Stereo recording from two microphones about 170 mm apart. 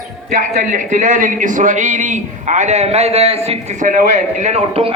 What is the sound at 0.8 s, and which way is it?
A man's voice, 45° right (ahead or behind).